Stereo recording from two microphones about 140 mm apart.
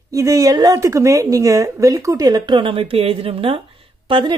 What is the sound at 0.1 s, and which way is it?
Speech, 25° right (ahead or behind).